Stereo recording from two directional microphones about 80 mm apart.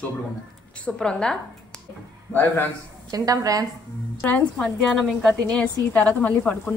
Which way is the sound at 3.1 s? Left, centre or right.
Right.